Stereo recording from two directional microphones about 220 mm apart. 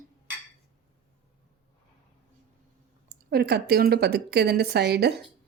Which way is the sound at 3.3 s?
45° right (ahead or behind).